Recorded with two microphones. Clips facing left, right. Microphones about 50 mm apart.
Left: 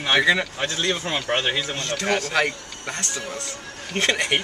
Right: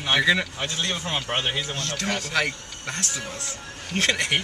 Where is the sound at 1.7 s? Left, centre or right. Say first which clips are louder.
Left 4 dB; centre.